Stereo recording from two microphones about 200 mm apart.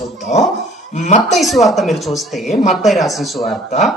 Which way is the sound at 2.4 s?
35° left (ahead or behind).